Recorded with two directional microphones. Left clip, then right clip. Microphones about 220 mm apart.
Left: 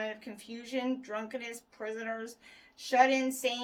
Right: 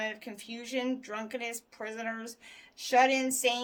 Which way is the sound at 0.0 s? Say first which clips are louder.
Right 2 dB; 40° right (ahead or behind).